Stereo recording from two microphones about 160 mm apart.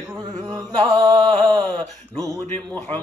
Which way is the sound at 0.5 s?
25° right (ahead or behind).